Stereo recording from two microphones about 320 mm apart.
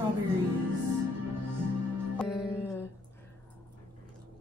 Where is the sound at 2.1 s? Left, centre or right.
Centre.